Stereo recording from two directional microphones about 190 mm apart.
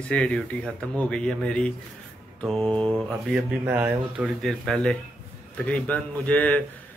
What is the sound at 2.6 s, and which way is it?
Mantra, 30° right (ahead or behind).